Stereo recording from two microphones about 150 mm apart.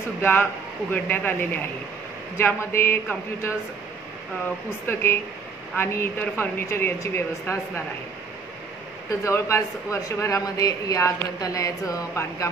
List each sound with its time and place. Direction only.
0.2 s a woman's voice: 10° left (ahead or behind)
4.8 s a woman's voice: 15° left (ahead or behind)
9.2 s a man's voice: 20° left (ahead or behind)